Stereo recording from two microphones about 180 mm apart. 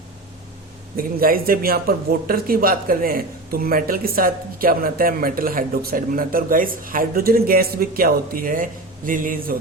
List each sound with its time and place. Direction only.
0.9 s speech: 55° right (ahead or behind)